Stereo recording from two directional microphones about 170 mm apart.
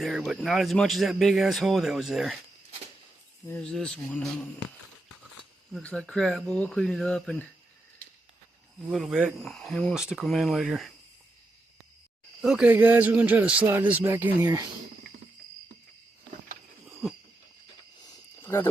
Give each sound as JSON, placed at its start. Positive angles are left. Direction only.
{"t": 0.0, "sound": "speech", "side_deg": 0}
{"t": 3.4, "sound": "speech", "side_deg": 10}
{"t": 5.7, "sound": "speech", "side_deg": 5}
{"t": 8.9, "sound": "speech", "side_deg": -5}
{"t": 12.4, "sound": "a man's voice", "side_deg": -5}
{"t": 16.8, "sound": "a sound", "side_deg": 0}
{"t": 18.0, "sound": "cricket", "side_deg": 15}